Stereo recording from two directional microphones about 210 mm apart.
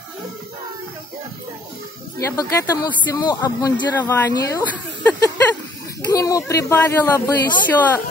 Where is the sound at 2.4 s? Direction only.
15° left (ahead or behind).